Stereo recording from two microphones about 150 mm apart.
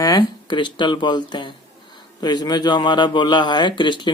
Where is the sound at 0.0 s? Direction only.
30° left (ahead or behind).